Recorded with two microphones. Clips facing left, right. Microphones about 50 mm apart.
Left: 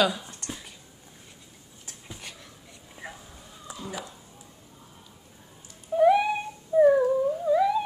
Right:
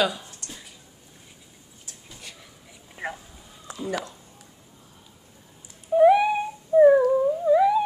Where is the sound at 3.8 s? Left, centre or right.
Right.